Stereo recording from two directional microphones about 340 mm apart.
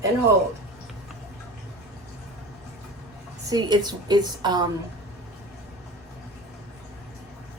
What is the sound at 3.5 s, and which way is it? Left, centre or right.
Speech, centre.